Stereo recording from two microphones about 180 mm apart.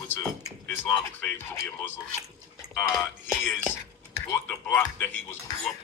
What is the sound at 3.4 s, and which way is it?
Cutlery, 10° left (ahead or behind).